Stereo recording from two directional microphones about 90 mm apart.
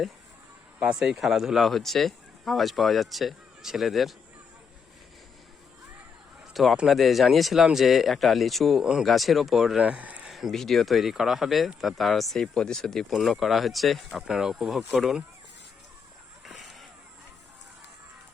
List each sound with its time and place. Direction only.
0.8 s speech: 10° right (ahead or behind)
6.5 s a man's voice: centre (ahead or behind); by 10.2 s 15° right (ahead or behind)
10.2 s speech: centre (ahead or behind)
16.5 s vehicle: centre (ahead or behind)